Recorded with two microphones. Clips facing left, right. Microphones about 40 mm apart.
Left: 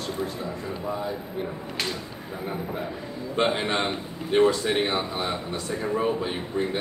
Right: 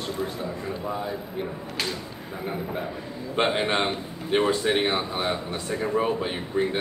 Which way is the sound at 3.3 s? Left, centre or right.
Right.